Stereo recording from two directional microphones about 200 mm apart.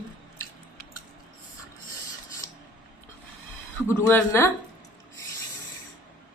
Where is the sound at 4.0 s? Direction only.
10° left (ahead or behind).